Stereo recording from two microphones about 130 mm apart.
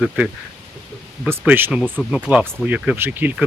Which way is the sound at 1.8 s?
10° left (ahead or behind).